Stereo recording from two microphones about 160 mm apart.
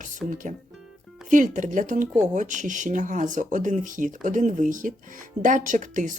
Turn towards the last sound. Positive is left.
turn(degrees=-55)  # may be behind; listen again after turning